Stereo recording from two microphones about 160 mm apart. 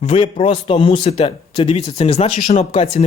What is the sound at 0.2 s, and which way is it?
Speech, 30° left (ahead or behind).